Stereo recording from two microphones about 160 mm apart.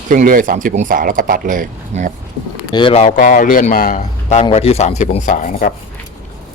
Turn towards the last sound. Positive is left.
turn(degrees=55)  # may be behind; listen again after turning